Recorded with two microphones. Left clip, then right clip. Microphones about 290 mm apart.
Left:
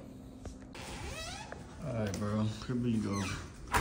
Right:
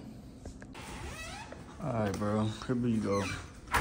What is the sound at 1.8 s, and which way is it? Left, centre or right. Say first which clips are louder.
Speech: right 5 dB; centre.